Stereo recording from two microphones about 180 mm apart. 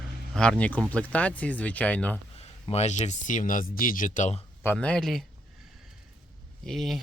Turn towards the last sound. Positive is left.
turn(degrees=0)  # may be behind; listen again after turning